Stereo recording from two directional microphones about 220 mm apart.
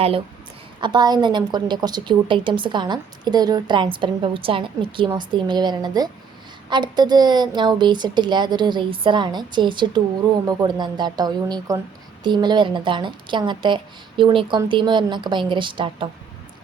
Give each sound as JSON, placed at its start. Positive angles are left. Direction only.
{"t": 0.8, "sound": "speech", "side_deg": -20}